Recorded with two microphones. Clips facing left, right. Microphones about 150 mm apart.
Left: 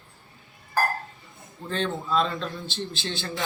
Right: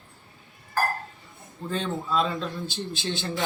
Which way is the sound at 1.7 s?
5° right (ahead or behind).